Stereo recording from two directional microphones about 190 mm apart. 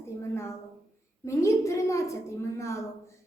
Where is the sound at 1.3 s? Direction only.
15° left (ahead or behind).